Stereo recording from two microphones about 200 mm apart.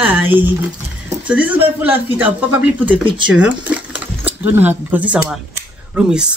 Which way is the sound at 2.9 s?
25° right (ahead or behind).